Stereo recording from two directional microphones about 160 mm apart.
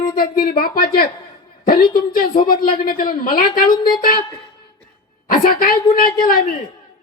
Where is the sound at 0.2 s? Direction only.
70° left (ahead or behind).